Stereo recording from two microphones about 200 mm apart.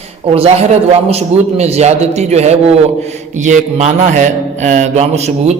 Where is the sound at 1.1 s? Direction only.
30° right (ahead or behind).